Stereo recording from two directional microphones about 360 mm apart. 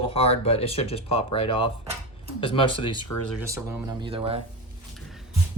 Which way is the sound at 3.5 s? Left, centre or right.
Centre.